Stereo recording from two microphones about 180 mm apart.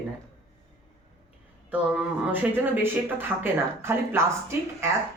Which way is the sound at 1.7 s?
10° right (ahead or behind).